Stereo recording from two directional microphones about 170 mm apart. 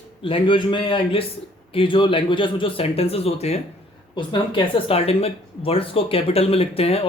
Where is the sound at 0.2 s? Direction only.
30° left (ahead or behind).